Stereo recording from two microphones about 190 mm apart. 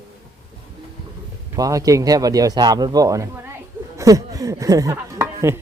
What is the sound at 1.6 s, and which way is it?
A man's voice, 20° right (ahead or behind).